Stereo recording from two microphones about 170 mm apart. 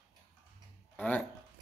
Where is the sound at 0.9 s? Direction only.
10° left (ahead or behind).